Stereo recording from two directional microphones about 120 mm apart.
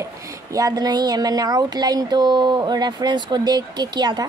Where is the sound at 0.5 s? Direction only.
30° right (ahead or behind).